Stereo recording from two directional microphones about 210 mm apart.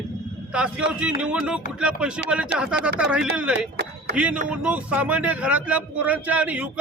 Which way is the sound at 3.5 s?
50° right (ahead or behind).